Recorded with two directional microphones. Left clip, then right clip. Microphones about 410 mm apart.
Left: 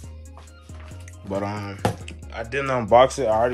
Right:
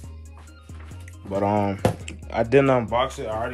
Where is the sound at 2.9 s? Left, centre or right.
Centre.